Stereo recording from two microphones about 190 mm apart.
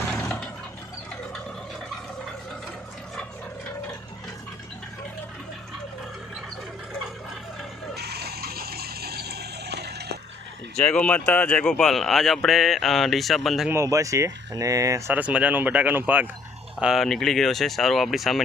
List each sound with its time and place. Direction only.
0.1 s a sound: 5° left (ahead or behind)
7.9 s water: 55° right (ahead or behind)
10.8 s a man's voice: 5° left (ahead or behind)
13.7 s a man's voice: 15° right (ahead or behind); by 18.4 s centre (ahead or behind)